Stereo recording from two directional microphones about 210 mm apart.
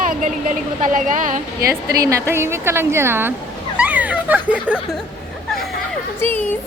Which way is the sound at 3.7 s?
5° right (ahead or behind).